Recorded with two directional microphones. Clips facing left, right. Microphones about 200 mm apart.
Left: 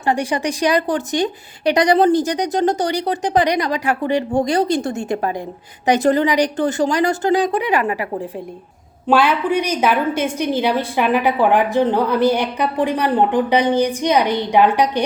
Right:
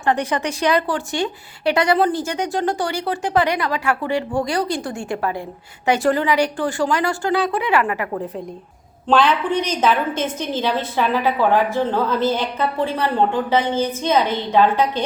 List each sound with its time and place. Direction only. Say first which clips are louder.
0.1 s a woman's voice: left 1 dB; 15° left (ahead or behind)